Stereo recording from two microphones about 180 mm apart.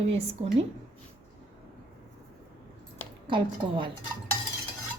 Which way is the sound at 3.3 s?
25° right (ahead or behind).